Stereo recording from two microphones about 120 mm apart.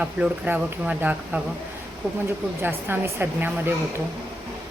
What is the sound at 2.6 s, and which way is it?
Speech, 15° right (ahead or behind).